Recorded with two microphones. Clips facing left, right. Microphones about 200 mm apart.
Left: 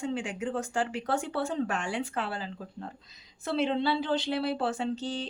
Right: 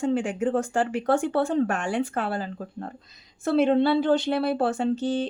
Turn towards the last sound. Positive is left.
turn(degrees=-50)  # may be behind; listen again after turning